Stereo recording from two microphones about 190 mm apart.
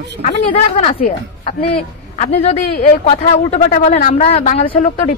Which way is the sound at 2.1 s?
35° left (ahead or behind).